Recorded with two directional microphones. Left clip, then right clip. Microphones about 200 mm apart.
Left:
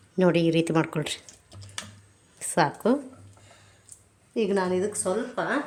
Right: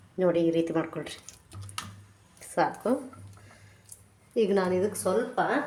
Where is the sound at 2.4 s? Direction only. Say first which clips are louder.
Left 3 dB; 50° left (ahead or behind).